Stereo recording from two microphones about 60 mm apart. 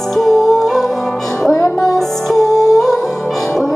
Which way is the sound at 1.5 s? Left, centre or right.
Left.